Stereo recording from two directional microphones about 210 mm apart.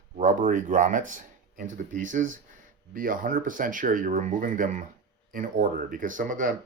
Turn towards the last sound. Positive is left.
turn(degrees=-40)  # may be behind; listen again after turning